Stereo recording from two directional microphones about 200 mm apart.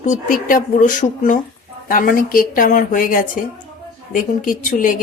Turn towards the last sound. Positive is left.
turn(degrees=40)  # may be behind; listen again after turning